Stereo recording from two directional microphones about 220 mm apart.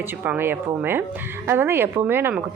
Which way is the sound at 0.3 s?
10° right (ahead or behind).